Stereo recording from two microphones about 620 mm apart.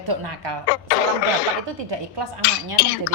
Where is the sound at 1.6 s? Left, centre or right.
Right.